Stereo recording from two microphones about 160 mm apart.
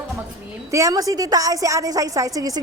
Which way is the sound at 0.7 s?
20° right (ahead or behind).